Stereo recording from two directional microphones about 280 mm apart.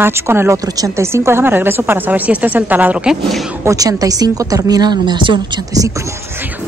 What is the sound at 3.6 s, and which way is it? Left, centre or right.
A woman's voice, centre.